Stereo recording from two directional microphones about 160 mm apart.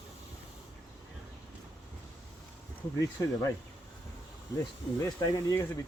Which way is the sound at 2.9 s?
20° left (ahead or behind).